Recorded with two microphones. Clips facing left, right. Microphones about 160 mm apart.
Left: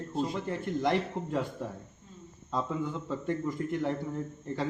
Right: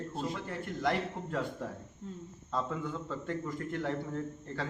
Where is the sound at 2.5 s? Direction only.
20° left (ahead or behind).